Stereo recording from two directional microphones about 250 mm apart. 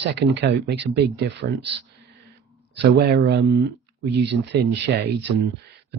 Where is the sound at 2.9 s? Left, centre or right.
Right.